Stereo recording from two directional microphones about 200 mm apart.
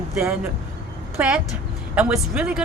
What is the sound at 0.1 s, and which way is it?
Speech, 5° right (ahead or behind).